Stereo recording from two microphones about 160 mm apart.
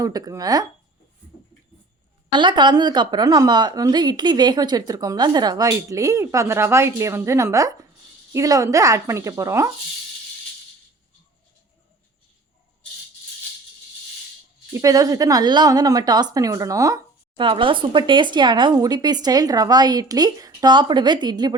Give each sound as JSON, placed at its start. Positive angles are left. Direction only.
{"t": 0.0, "sound": "speech", "side_deg": -20}
{"t": 2.3, "sound": "speech", "side_deg": -30}
{"t": 14.7, "sound": "speech", "side_deg": -20}